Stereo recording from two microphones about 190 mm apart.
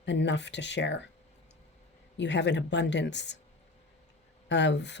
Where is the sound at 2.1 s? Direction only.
70° left (ahead or behind).